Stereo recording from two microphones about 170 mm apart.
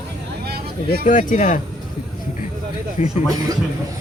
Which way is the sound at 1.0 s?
50° left (ahead or behind).